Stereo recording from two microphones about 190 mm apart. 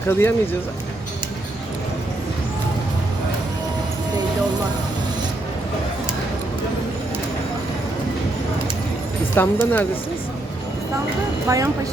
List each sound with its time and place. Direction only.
0.1 s speech: 10° left (ahead or behind)
9.3 s speech: 10° left (ahead or behind)
11.4 s speech: 15° right (ahead or behind)